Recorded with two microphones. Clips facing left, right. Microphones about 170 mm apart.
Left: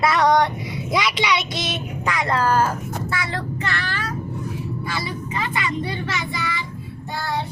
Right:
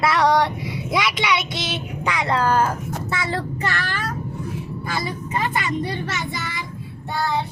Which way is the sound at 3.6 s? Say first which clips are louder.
Right 1 dB; 40° right (ahead or behind).